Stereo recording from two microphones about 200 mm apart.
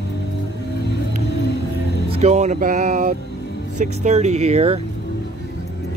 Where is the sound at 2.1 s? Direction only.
35° right (ahead or behind).